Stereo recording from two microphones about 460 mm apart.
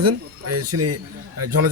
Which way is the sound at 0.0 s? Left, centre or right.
Right.